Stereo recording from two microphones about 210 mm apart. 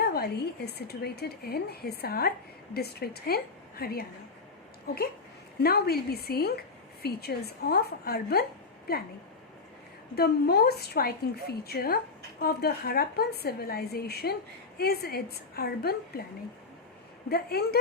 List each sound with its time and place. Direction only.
0.0 s speech: 50° left (ahead or behind)
5.6 s speech: 50° left (ahead or behind)
10.2 s speech: 50° left (ahead or behind)
17.2 s speech: 50° left (ahead or behind)